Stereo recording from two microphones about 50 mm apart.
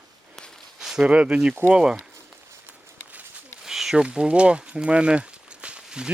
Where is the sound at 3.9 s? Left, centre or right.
Centre.